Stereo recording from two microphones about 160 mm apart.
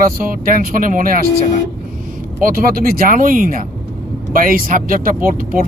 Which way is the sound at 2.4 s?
65° right (ahead or behind).